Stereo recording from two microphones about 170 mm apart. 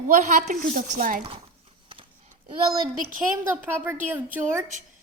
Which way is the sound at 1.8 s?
30° right (ahead or behind).